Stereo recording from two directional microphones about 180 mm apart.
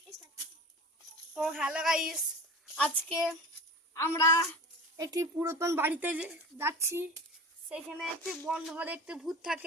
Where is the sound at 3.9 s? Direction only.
15° left (ahead or behind).